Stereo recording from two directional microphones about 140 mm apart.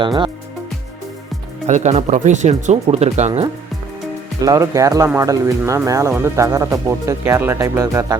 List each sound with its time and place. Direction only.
0.0 s speech: 35° right (ahead or behind)
1.6 s speech: 55° right (ahead or behind)
4.4 s speech: 25° right (ahead or behind)